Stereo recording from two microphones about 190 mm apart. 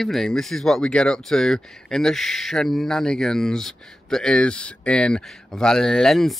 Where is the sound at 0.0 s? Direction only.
Centre (ahead or behind).